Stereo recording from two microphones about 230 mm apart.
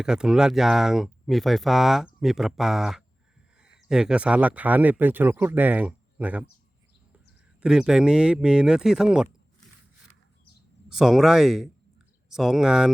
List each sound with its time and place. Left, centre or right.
0.0 s speech: centre
7.6 s speech: centre
10.8 s speech: centre